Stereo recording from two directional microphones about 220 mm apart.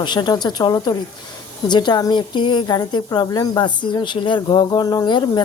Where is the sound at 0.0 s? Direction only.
20° left (ahead or behind).